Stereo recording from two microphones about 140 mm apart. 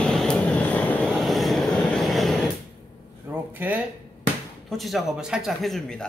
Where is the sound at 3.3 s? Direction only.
15° right (ahead or behind).